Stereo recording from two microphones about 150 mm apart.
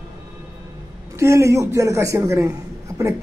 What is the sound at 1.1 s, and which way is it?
Speech, 20° right (ahead or behind).